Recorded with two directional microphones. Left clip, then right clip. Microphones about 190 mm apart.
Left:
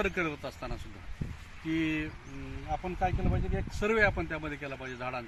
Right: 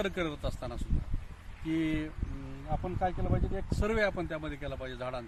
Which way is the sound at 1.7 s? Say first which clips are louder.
Left 1 dB; 20° right (ahead or behind).